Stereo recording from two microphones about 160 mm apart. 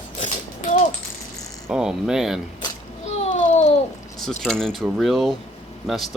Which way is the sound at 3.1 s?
45° left (ahead or behind).